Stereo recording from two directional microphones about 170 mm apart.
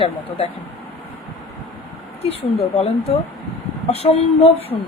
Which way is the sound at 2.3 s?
35° left (ahead or behind).